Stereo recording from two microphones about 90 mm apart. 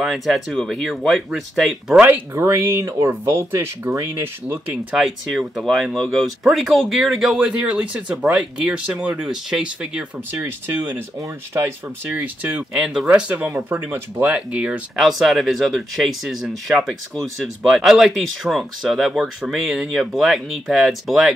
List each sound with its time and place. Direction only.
0.0 s speech: centre (ahead or behind)
2.0 s speech: 20° right (ahead or behind)
2.3 s speech: 30° right (ahead or behind)
4.9 s speech: 5° right (ahead or behind); by 11.0 s 20° right (ahead or behind)
12.1 s speech: 15° right (ahead or behind)
12.7 s speech: 5° right (ahead or behind)
15.0 s speech: centre (ahead or behind)